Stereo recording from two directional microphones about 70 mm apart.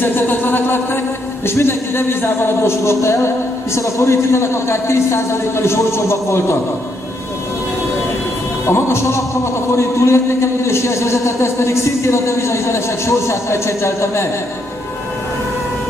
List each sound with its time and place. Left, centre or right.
0.0 s a sound: left
1.4 s a man's voice: left
8.6 s a man's voice: left